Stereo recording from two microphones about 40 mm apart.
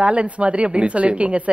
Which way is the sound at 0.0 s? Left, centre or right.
Right.